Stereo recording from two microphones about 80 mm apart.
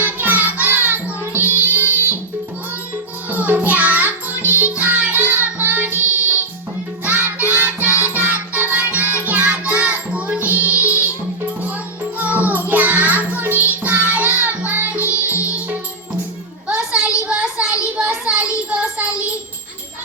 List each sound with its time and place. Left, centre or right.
0.2 s music: right
3.2 s music: right
12.1 s music: centre
16.6 s a sound: centre
18.3 s child singing: centre